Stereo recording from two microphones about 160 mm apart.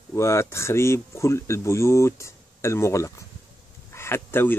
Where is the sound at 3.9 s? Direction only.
15° left (ahead or behind).